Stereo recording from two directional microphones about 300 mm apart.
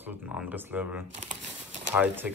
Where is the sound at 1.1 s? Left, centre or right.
Right.